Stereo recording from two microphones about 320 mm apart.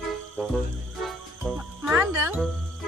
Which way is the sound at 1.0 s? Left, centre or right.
Centre.